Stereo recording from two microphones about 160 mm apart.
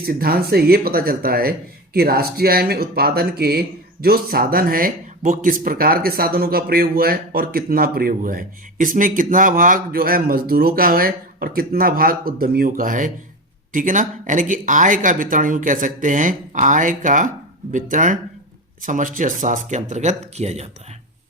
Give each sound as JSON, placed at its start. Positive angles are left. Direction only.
{"t": 0.0, "sound": "speech", "side_deg": -65}